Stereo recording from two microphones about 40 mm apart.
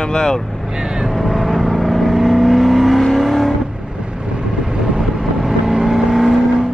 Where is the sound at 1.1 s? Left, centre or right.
Centre.